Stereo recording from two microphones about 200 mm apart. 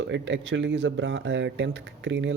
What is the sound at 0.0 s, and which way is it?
A man's voice, 65° right (ahead or behind).